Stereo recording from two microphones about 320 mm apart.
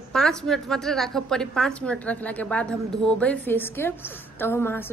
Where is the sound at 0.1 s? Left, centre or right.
Centre.